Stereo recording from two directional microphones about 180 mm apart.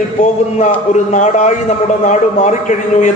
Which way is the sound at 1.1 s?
40° left (ahead or behind).